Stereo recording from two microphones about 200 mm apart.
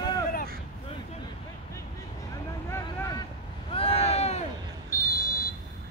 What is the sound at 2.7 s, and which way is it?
Vehicle, 15° left (ahead or behind).